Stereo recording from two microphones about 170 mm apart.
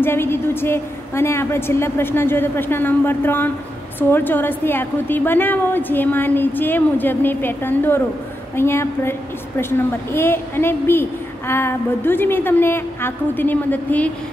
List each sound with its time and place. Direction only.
0.0 s a woman's voice: 15° left (ahead or behind)